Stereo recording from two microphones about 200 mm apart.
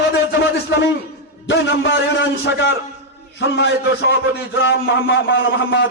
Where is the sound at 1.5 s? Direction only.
65° left (ahead or behind).